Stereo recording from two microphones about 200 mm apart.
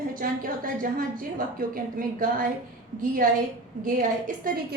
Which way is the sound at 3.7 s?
40° right (ahead or behind).